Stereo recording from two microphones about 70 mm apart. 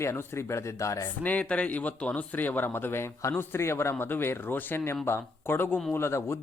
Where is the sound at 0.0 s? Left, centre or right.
Left.